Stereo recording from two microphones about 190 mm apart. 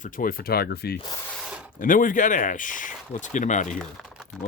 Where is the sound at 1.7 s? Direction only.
45° left (ahead or behind).